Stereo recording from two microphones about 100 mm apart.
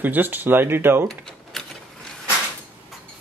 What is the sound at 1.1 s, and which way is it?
Typing, 5° left (ahead or behind).